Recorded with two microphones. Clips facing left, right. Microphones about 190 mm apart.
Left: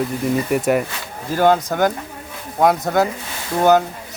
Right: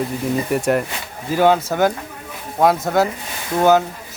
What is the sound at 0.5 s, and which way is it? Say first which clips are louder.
Speech: left 1 dB; centre (ahead or behind).